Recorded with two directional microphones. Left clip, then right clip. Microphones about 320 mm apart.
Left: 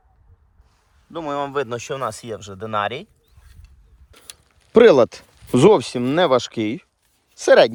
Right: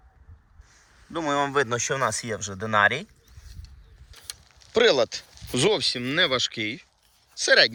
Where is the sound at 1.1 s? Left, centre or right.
Centre.